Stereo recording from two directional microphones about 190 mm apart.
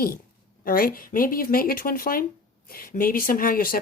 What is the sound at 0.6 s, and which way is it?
Speech, 50° left (ahead or behind).